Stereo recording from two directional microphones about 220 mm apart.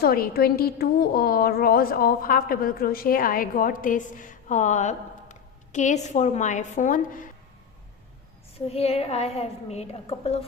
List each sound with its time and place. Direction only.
0.0 s a woman's voice: 40° left (ahead or behind)
8.5 s a woman's voice: 25° left (ahead or behind)